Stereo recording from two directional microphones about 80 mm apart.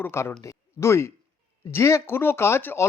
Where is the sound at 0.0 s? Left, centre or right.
Left.